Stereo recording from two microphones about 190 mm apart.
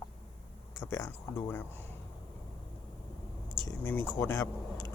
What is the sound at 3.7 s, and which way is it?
Speech, 10° left (ahead or behind).